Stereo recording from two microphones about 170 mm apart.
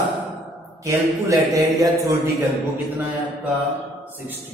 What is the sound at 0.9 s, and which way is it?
A man's voice, 20° right (ahead or behind).